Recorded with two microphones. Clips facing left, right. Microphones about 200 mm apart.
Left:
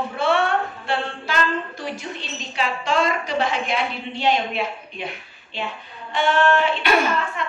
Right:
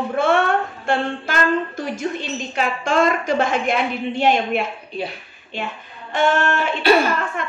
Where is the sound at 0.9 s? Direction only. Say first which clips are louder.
Right 5 dB; 50° right (ahead or behind).